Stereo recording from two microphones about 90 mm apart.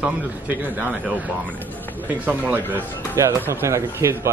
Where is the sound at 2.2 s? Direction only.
20° right (ahead or behind).